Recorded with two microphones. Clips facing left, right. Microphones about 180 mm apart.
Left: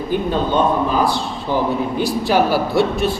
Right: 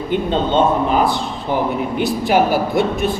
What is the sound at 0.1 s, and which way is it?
A man's voice, 25° right (ahead or behind).